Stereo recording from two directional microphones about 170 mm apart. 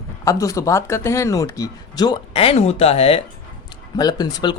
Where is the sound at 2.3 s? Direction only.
35° left (ahead or behind).